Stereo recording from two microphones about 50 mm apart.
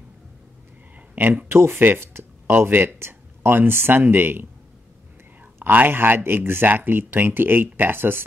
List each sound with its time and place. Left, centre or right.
0.9 s a sound: right
1.5 s speech: right
5.6 s speech: right